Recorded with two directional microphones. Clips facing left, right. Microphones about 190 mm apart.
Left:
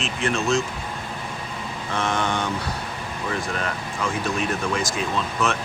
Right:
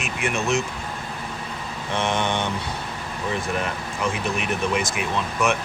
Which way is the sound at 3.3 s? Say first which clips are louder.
Right 1 dB; 20° right (ahead or behind).